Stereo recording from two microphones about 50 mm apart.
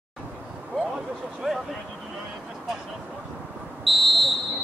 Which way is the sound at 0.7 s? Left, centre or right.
Centre.